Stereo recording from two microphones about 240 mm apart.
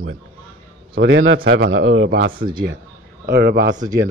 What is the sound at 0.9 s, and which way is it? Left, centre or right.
A man's voice, right.